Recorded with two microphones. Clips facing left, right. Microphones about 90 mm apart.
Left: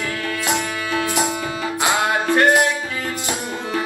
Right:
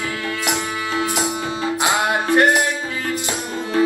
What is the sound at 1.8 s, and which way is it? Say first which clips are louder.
Music: left 1 dB; 20° right (ahead or behind).